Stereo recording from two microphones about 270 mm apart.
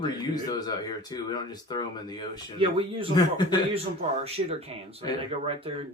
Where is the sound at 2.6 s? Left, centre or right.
Centre.